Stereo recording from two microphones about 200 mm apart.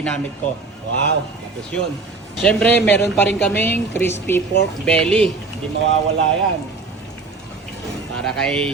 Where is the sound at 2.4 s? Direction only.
5° left (ahead or behind).